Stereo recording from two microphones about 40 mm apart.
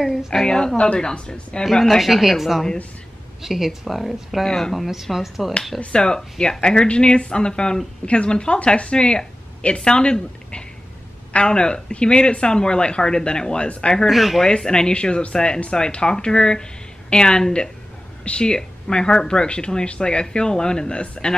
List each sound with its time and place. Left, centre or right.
0.3 s a woman's voice: centre
1.6 s speech: centre
4.5 s a woman's voice: centre
4.7 s speech: centre
5.9 s speech: centre
14.0 s speech: centre
14.5 s speech: centre